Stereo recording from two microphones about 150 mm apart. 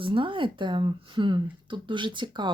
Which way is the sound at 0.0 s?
35° right (ahead or behind).